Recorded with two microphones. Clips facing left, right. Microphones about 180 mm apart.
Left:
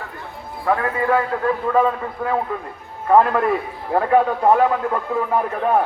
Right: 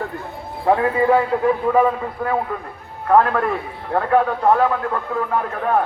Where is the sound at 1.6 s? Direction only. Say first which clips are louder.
Right 2 dB; 10° right (ahead or behind).